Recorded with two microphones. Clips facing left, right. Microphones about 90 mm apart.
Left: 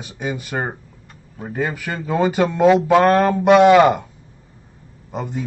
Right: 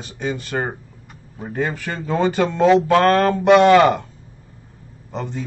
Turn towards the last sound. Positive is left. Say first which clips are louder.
# left 1 dB
turn(degrees=10)  # may be behind; listen again after turning